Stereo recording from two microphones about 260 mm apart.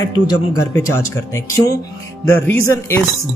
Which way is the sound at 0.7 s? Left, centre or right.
Centre.